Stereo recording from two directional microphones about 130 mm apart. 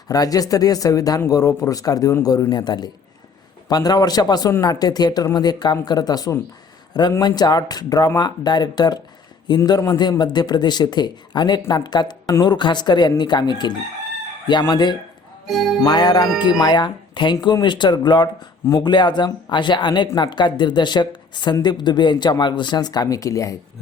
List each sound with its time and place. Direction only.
0.1 s speech: 30° left (ahead or behind)
15.4 s speech: centre (ahead or behind)
15.8 s speech: 35° left (ahead or behind)